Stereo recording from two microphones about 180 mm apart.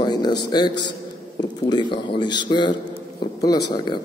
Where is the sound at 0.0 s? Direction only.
25° left (ahead or behind).